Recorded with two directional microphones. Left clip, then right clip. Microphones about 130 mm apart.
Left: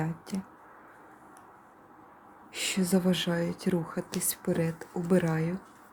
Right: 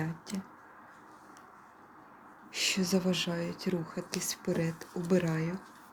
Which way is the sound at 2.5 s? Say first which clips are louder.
Even; 25° left (ahead or behind).